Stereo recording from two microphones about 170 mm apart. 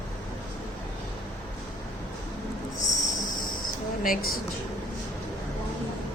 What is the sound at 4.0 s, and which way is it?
Speech, 55° left (ahead or behind).